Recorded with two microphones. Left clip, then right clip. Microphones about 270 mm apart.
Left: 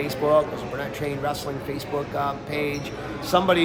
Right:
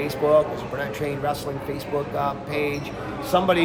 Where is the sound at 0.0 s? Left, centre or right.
Centre.